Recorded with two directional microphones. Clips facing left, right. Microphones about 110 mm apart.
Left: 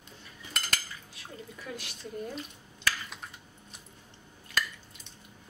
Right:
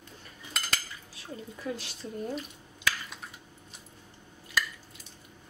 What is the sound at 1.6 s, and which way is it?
Speech, 30° right (ahead or behind).